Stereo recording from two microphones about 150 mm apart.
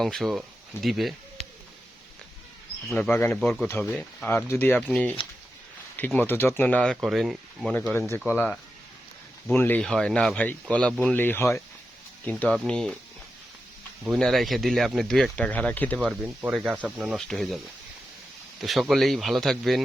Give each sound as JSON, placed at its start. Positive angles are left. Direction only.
{"t": 0.0, "sound": "speech", "side_deg": 0}
{"t": 2.9, "sound": "speech", "side_deg": 10}
{"t": 6.1, "sound": "speech", "side_deg": 15}
{"t": 6.9, "sound": "speech", "side_deg": 0}
{"t": 9.5, "sound": "speech", "side_deg": 10}
{"t": 14.2, "sound": "speech", "side_deg": 0}
{"t": 16.0, "sound": "speech", "side_deg": -10}
{"t": 17.2, "sound": "speech", "side_deg": 0}
{"t": 18.6, "sound": "speech", "side_deg": 0}